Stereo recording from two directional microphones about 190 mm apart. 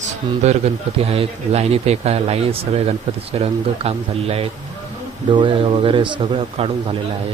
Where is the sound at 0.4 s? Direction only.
30° right (ahead or behind).